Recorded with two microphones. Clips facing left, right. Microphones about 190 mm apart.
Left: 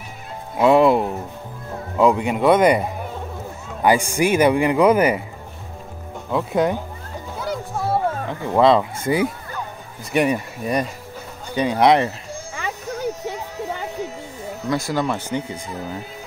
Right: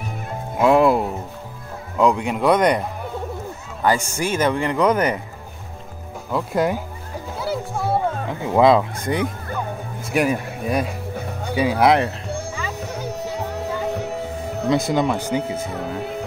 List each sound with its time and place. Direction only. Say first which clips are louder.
0.6 s a man's voice: left 1 dB; centre (ahead or behind)
6.3 s speech: left 1 dB; centre (ahead or behind)
7.3 s music: right 1 dB; 5° right (ahead or behind)
8.3 s speech: right 1 dB; 10° right (ahead or behind)
9.0 s speech: left 3 dB; 5° left (ahead or behind)
12.8 s music: left 4 dB; 65° right (ahead or behind)
14.7 s speech: right 3 dB; 20° right (ahead or behind)
15.6 s speech: right 4 dB; 65° right (ahead or behind)